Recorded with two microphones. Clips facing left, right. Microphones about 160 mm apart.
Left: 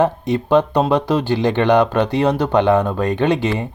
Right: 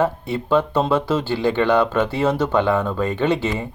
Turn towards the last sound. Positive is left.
turn(degrees=15)  # may be behind; listen again after turning